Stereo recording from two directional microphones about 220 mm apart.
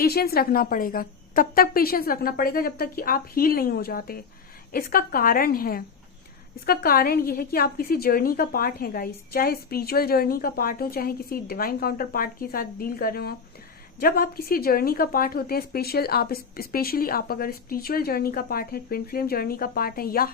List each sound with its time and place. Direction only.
0.0 s a woman's voice: 45° left (ahead or behind)